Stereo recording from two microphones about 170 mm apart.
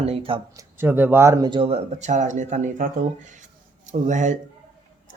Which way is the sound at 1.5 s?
30° right (ahead or behind).